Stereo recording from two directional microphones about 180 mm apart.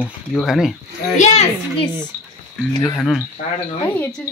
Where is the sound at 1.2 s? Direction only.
40° left (ahead or behind).